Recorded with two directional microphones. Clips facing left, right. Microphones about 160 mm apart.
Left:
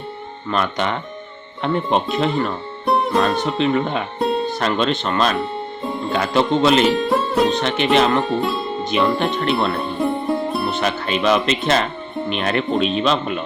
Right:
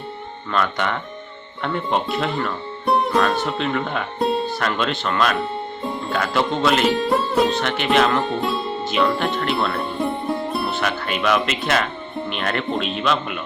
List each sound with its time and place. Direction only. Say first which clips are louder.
0.5 s speech: left 1 dB; 20° left (ahead or behind)
2.8 s music: left 1 dB; centre (ahead or behind)
3.4 s speech: left 4 dB; 20° left (ahead or behind)
4.2 s music: left 1 dB; centre (ahead or behind)
4.6 s speech: left 3 dB; 20° left (ahead or behind)
5.8 s music: left 3 dB; centre (ahead or behind)
6.1 s speech: left 4 dB; 20° left (ahead or behind)
6.8 s music: left 2 dB; centre (ahead or behind)
7.5 s speech: left 2 dB; 20° left (ahead or behind)
8.2 s speech: left 2 dB; centre (ahead or behind)
8.8 s music: left 2 dB; 20° left (ahead or behind)
9.1 s speech: left 3 dB; 20° left (ahead or behind)
9.7 s music: left 3 dB; centre (ahead or behind)
10.7 s speech: left 3 dB; 20° left (ahead or behind)